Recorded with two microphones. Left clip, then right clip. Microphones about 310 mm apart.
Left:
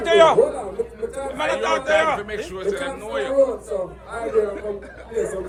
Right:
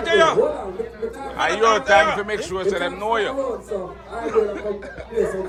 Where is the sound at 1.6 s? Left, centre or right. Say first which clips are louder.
Right 7 dB; centre.